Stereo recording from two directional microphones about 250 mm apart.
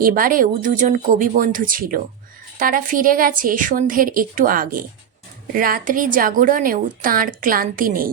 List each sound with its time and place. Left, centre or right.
0.0 s a woman's voice: right